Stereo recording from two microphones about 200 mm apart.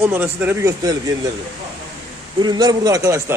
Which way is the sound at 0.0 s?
10° right (ahead or behind).